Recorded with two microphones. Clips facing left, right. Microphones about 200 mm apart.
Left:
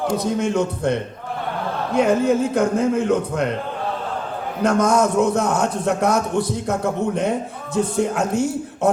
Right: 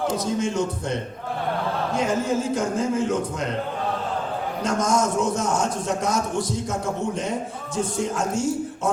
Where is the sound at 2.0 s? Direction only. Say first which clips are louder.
Left 8 dB; 60° left (ahead or behind).